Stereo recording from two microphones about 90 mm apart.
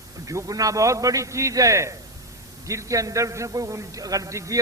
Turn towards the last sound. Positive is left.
turn(degrees=-35)  # may be behind; listen again after turning